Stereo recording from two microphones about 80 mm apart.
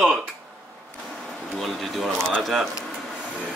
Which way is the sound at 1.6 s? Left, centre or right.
Centre.